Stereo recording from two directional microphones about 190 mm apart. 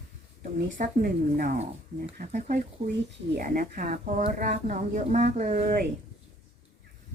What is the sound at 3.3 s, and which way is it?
Speech, 50° right (ahead or behind).